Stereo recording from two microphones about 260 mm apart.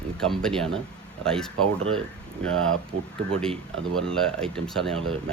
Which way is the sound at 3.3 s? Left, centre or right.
Centre.